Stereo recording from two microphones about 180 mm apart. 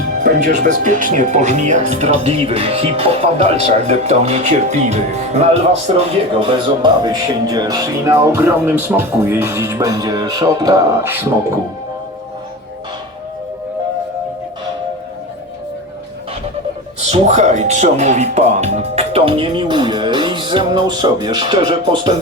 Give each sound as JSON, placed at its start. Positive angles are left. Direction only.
{"t": 0.2, "sound": "speech", "side_deg": -45}
{"t": 6.4, "sound": "speech", "side_deg": -25}
{"t": 17.0, "sound": "speech", "side_deg": -40}